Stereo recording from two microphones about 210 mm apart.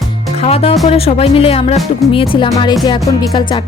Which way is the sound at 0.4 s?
30° left (ahead or behind).